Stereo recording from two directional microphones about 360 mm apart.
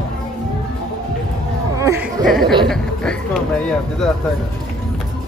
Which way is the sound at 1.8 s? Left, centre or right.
Centre.